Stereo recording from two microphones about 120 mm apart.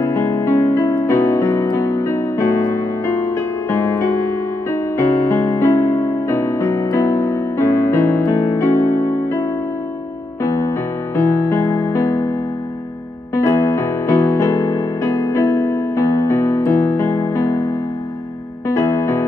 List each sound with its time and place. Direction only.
0.0 s music: 25° left (ahead or behind)
3.7 s music: 20° left (ahead or behind)
10.4 s music: 25° left (ahead or behind)
18.7 s music: 25° left (ahead or behind)